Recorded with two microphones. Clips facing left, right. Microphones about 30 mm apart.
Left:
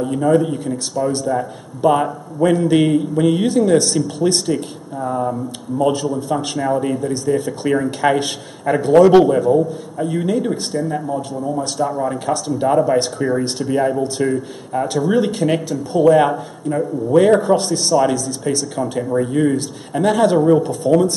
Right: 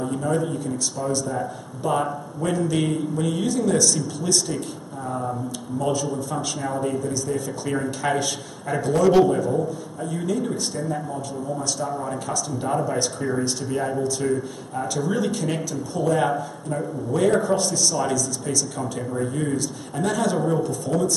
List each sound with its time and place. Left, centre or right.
0.4 s a man's voice: left
12.3 s a man's voice: left
12.6 s a man's voice: left